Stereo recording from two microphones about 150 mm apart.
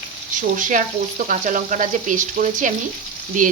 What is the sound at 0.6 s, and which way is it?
Frying, 60° right (ahead or behind).